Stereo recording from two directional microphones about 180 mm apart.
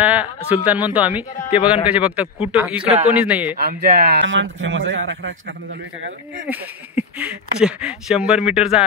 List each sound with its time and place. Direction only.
0.0 s speech: 10° right (ahead or behind)
3.5 s a man's voice: 60° right (ahead or behind); by 5.3 s 90° right
6.4 s speech: 10° right (ahead or behind)